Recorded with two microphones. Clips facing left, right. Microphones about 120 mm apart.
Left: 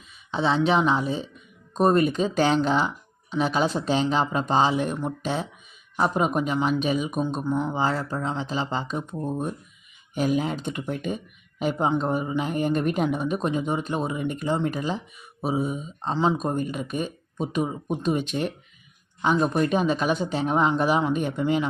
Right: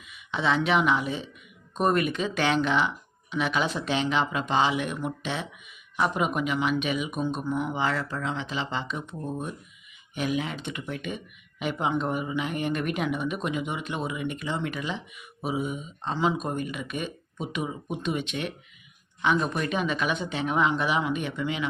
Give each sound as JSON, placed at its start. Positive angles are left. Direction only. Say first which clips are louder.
{"t": 0.0, "sound": "speech", "louder": "left 3 dB", "side_deg": 35}